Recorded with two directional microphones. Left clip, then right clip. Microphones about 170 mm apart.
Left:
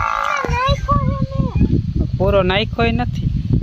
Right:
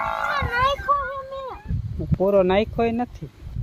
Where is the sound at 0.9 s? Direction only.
15° left (ahead or behind).